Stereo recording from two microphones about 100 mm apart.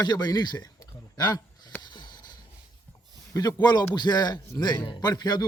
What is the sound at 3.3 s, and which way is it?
A man's voice, 40° left (ahead or behind).